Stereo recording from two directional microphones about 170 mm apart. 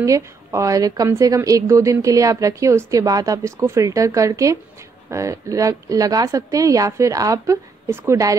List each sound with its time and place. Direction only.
0.0 s a woman's voice: 20° right (ahead or behind)